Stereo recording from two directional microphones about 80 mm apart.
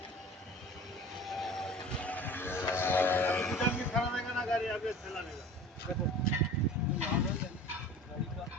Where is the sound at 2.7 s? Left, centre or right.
Left.